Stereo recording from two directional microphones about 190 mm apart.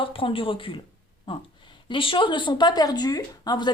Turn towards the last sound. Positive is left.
turn(degrees=20)  # may be behind; listen again after turning